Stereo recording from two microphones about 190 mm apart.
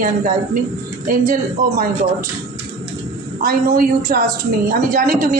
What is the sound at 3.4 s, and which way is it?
Speech, 50° right (ahead or behind).